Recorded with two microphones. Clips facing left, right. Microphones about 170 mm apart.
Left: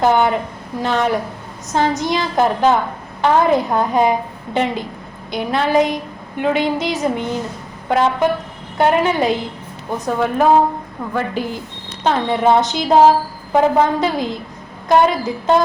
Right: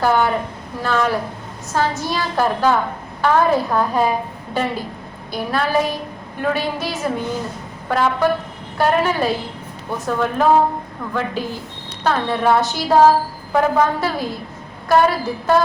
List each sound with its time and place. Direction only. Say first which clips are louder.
0.0 s a woman's voice: left 2 dB; 20° left (ahead or behind)
5.3 s a woman's voice: left 3 dB; 20° left (ahead or behind)